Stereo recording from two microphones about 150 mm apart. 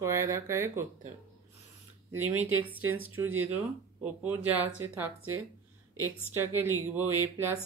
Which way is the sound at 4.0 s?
10° right (ahead or behind).